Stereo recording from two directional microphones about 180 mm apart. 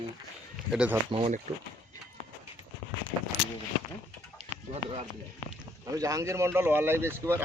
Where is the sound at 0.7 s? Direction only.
10° right (ahead or behind).